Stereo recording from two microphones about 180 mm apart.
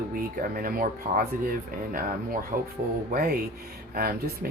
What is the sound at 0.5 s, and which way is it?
Speech, 55° right (ahead or behind).